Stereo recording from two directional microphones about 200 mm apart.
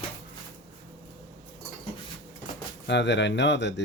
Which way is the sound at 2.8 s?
60° left (ahead or behind).